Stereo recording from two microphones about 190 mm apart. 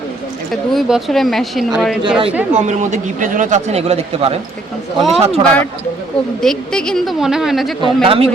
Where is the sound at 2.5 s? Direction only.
40° right (ahead or behind).